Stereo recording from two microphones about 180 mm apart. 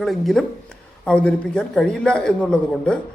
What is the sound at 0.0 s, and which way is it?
Speech, centre (ahead or behind).